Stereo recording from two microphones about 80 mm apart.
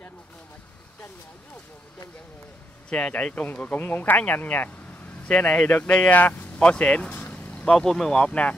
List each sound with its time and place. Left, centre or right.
2.9 s speech: centre